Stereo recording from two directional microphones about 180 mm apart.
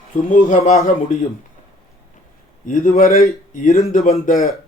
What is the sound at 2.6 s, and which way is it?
Speech, 45° left (ahead or behind).